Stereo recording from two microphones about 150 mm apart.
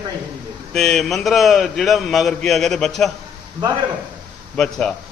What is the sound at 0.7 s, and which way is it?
Mantra, 5° left (ahead or behind).